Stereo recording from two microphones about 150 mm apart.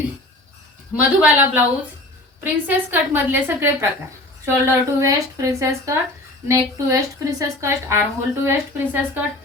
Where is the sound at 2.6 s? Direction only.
15° right (ahead or behind).